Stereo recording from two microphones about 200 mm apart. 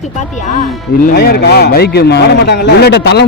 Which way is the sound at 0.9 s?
50° left (ahead or behind).